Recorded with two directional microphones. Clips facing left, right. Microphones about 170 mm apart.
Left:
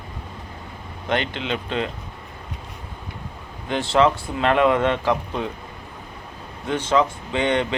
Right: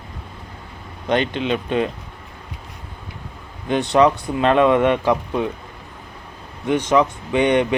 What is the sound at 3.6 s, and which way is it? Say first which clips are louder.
Speech: right 3 dB; 20° right (ahead or behind).